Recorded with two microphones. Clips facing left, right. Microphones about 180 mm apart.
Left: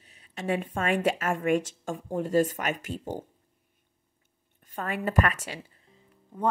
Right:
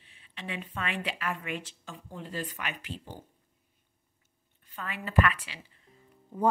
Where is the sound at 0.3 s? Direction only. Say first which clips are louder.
Left 10 dB; 45° left (ahead or behind).